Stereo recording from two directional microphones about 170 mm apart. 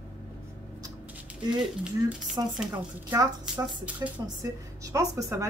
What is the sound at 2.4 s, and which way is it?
Speech, 20° right (ahead or behind).